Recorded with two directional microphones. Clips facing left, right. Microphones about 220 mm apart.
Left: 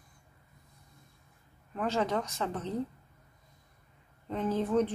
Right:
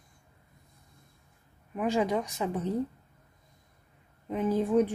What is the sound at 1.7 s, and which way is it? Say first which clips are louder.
Speech: right 3 dB; 15° right (ahead or behind).